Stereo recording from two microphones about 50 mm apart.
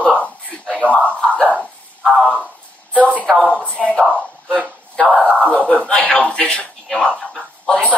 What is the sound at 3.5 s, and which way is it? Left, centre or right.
Speech, left.